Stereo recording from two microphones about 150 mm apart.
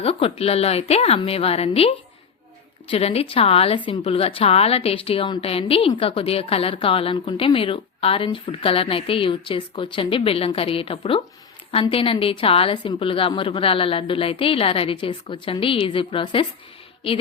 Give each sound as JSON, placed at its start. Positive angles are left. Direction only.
{"t": 0.0, "sound": "a woman's voice", "side_deg": 40}
{"t": 2.9, "sound": "a woman's voice", "side_deg": 40}